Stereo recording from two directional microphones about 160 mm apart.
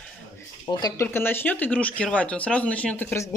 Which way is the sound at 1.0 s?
15° left (ahead or behind).